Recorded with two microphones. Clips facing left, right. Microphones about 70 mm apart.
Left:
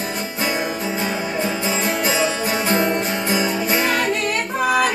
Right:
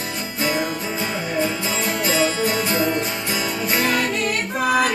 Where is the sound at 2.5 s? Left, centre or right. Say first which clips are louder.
Left 2 dB; left.